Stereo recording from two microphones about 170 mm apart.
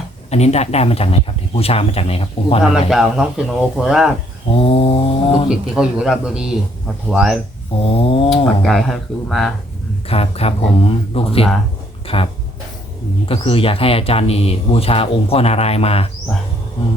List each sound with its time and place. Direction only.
0.3 s speech: 40° left (ahead or behind)
2.9 s speech: centre (ahead or behind)
4.5 s speech: 35° left (ahead or behind)
5.5 s speech: 5° right (ahead or behind)
7.8 s a sound: 35° left (ahead or behind)
8.6 s speech: centre (ahead or behind)
10.1 s speech: 35° left (ahead or behind)